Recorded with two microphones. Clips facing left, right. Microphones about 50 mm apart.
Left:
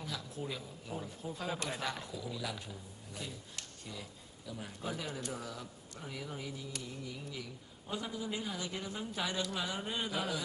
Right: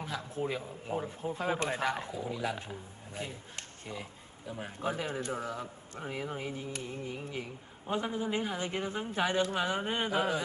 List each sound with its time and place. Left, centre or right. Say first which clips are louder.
0.0 s a man's voice: right 6 dB; right